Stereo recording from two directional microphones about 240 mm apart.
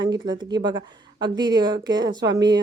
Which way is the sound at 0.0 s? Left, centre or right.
Centre.